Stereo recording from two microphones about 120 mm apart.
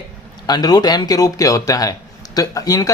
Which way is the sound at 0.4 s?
35° left (ahead or behind).